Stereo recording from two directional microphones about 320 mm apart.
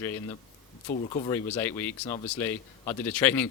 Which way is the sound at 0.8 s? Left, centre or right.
Centre.